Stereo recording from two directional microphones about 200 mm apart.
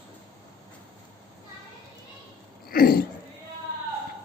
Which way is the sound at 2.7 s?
50° left (ahead or behind).